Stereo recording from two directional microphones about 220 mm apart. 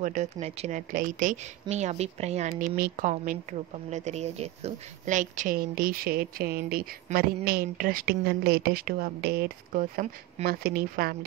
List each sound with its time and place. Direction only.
0.0 s a woman's voice: 35° right (ahead or behind)